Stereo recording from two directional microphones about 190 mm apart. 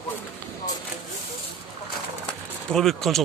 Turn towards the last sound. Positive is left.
turn(degrees=0)  # may be behind; listen again after turning